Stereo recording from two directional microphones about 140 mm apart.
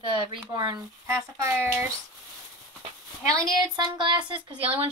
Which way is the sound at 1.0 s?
20° right (ahead or behind).